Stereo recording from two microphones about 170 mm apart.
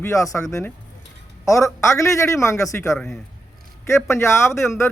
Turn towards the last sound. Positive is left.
turn(degrees=15)  # may be behind; listen again after turning